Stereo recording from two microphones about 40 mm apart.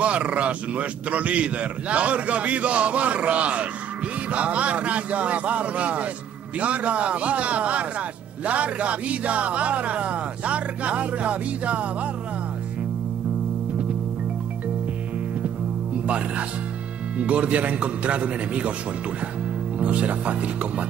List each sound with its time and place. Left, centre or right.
0.0 s a man's voice: right
17.2 s a man's voice: right
19.8 s a man's voice: right